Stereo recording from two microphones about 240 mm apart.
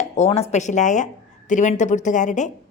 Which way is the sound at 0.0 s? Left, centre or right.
Left.